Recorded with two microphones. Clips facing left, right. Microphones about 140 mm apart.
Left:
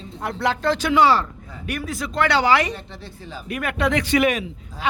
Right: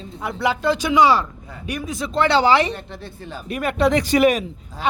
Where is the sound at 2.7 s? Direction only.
55° right (ahead or behind).